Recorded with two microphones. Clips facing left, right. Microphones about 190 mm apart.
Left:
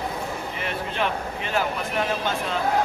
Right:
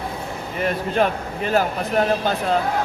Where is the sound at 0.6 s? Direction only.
40° right (ahead or behind).